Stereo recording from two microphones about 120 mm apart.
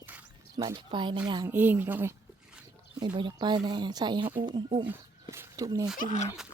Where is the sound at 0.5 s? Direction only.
40° right (ahead or behind).